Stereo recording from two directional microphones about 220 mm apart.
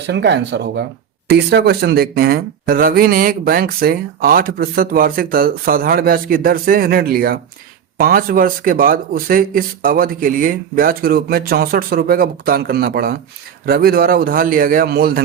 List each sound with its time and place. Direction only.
0.1 s a man's voice: 50° right (ahead or behind)